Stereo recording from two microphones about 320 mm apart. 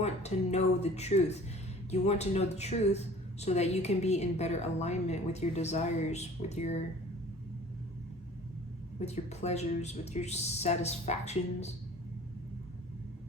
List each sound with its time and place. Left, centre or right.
0.0 s a woman's voice: centre
9.0 s a woman's voice: centre